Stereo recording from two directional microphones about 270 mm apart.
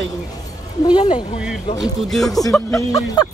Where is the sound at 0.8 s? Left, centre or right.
Centre.